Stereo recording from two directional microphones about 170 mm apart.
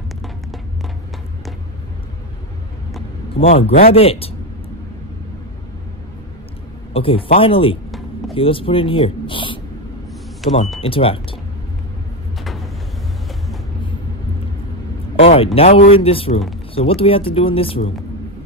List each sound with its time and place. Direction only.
3.5 s speech: 35° left (ahead or behind)
6.9 s speech: 30° left (ahead or behind)
10.4 s speech: centre (ahead or behind)
10.8 s speech: 35° left (ahead or behind)
15.1 s speech: 35° left (ahead or behind)